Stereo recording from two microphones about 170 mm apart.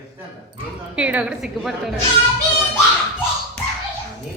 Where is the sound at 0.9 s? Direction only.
10° right (ahead or behind).